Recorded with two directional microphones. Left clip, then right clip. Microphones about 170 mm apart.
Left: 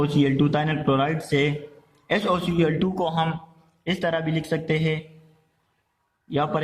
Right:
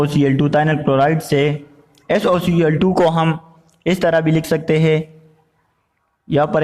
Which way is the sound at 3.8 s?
50° right (ahead or behind).